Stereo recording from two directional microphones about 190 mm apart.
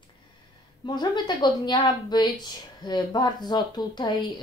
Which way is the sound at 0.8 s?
20° left (ahead or behind).